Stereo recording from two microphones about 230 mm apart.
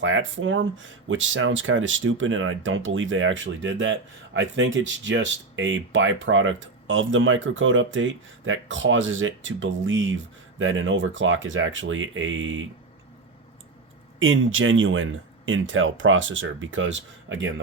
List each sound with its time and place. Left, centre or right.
0.0 s speech: right
14.2 s speech: right